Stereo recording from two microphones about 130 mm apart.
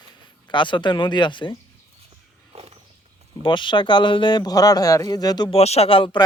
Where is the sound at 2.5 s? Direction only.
50° right (ahead or behind).